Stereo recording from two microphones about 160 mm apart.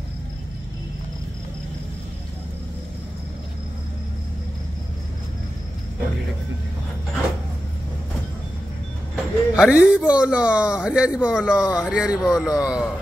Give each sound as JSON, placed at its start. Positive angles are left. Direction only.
{"t": 9.1, "sound": "speech", "side_deg": -5}